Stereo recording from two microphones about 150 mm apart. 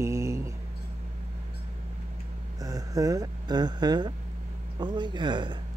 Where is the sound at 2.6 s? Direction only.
25° right (ahead or behind).